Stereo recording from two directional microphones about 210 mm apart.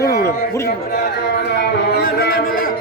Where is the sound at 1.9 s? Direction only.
50° left (ahead or behind).